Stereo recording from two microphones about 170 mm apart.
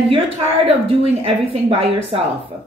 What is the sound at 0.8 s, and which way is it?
A woman's voice, 35° right (ahead or behind).